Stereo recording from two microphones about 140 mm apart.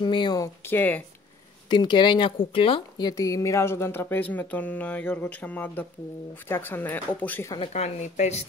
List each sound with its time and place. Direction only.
0.0 s speech: 30° left (ahead or behind)
0.6 s a woman's voice: 15° left (ahead or behind)
1.7 s a woman's voice: 30° left (ahead or behind); by 7.5 s 15° left (ahead or behind)
7.7 s speech: 55° left (ahead or behind)